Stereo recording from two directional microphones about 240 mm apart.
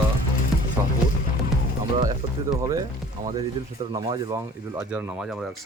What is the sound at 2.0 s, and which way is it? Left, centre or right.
Music, centre.